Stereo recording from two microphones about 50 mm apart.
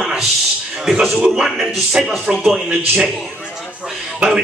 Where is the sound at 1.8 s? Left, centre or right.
Centre.